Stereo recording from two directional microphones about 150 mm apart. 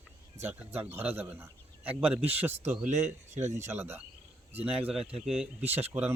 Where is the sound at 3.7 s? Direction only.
15° right (ahead or behind).